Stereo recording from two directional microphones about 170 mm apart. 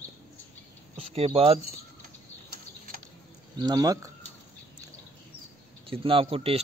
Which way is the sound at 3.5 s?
25° right (ahead or behind).